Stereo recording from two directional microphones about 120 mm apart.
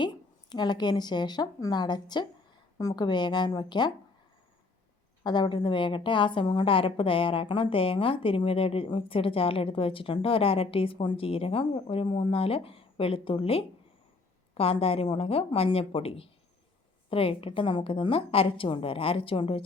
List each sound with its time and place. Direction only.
0.5 s speech: 35° left (ahead or behind)
5.2 s a woman's voice: 35° left (ahead or behind)